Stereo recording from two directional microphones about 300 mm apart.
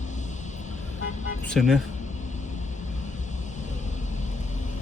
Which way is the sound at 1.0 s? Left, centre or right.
Left.